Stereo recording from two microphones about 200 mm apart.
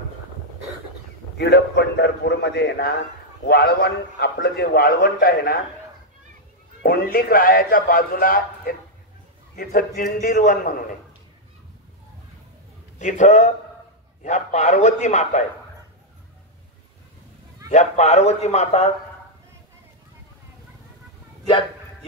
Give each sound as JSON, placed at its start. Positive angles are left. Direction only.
{"t": 1.4, "sound": "a man's voice", "side_deg": 55}
{"t": 6.8, "sound": "a man's voice", "side_deg": 50}
{"t": 13.0, "sound": "a man's voice", "side_deg": 35}
{"t": 17.6, "sound": "a man's voice", "side_deg": 35}